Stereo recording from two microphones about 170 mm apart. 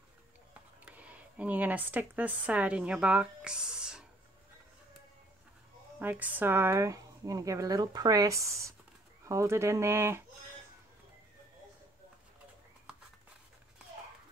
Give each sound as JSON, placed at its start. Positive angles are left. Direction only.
{"t": 0.8, "sound": "speech", "side_deg": -10}
{"t": 5.9, "sound": "speech", "side_deg": -10}